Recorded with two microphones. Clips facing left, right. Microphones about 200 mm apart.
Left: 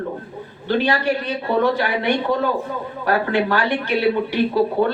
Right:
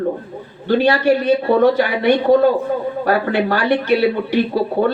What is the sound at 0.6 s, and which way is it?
Speech, 45° right (ahead or behind).